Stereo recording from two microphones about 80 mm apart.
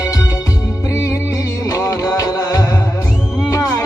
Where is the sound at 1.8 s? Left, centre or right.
Left.